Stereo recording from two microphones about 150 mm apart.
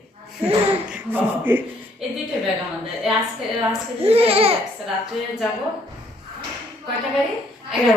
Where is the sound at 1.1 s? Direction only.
15° right (ahead or behind).